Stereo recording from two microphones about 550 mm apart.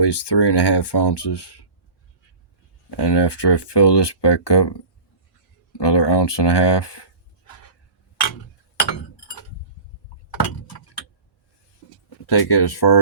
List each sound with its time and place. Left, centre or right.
0.0 s speech: left
2.9 s speech: left
12.2 s speech: left